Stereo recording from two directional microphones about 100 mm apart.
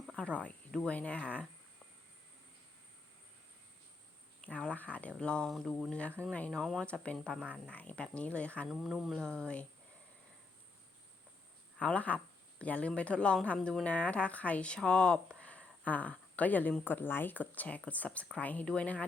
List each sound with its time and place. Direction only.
0.2 s a woman's voice: 10° left (ahead or behind)
4.5 s a woman's voice: 10° left (ahead or behind)
8.6 s a sound: centre (ahead or behind)
11.8 s a woman's voice: 10° left (ahead or behind)
15.4 s a sound: 15° left (ahead or behind)
16.8 s a woman's voice: 20° left (ahead or behind)